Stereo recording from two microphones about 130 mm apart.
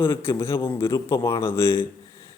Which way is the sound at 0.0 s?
20° left (ahead or behind).